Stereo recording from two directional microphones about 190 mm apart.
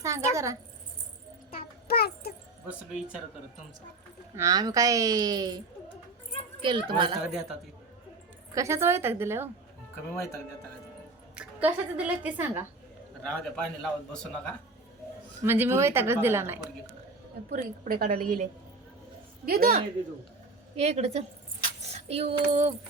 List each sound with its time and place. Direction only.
0.0 s a woman's voice: 15° right (ahead or behind)
1.9 s a sound: 55° left (ahead or behind)
4.4 s speech: 15° right (ahead or behind)
8.5 s a woman's voice: 15° right (ahead or behind)
10.2 s speech: 15° left (ahead or behind)
11.3 s a woman's voice: 5° right (ahead or behind)
13.2 s a man's voice: 5° left (ahead or behind)
15.4 s a woman's voice: 10° right (ahead or behind)
17.5 s a woman's voice: 45° right (ahead or behind)
19.5 s a woman's voice: 50° right (ahead or behind)
20.7 s a woman's voice: 35° right (ahead or behind)